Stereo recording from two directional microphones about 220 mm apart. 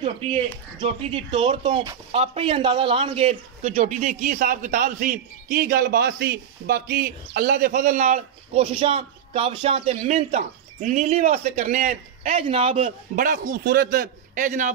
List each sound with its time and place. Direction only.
0.0 s speech: 25° right (ahead or behind)